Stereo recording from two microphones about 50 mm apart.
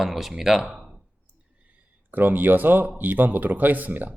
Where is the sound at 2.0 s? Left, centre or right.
Right.